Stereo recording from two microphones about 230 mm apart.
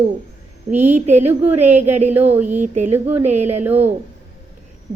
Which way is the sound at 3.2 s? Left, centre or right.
Right.